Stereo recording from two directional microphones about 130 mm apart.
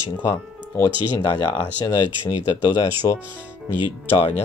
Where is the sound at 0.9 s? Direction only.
40° right (ahead or behind).